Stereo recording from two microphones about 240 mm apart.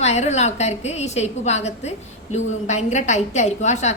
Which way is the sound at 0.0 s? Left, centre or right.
Left.